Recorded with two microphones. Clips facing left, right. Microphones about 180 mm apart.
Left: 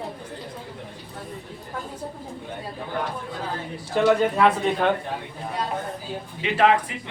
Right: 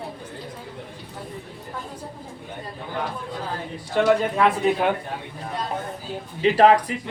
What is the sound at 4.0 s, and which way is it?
Speech, centre (ahead or behind).